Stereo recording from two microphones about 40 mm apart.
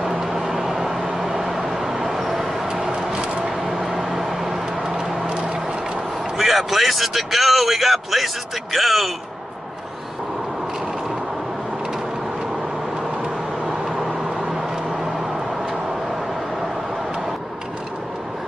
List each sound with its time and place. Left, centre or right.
0.0 s vehicle: centre
2.1 s a sound: centre
3.4 s vehicle: centre
4.9 s a sound: centre
6.3 s a man's voice: centre
13.7 s vehicle: centre